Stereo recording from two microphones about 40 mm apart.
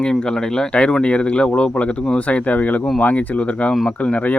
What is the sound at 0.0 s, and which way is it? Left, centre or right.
Speech, centre.